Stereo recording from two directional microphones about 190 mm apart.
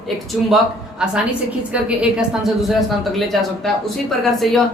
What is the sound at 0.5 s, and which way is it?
Speech, 5° right (ahead or behind).